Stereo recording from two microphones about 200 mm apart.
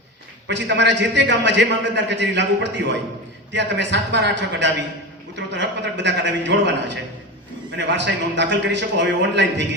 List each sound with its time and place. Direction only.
0.4 s a man's voice: 60° right (ahead or behind)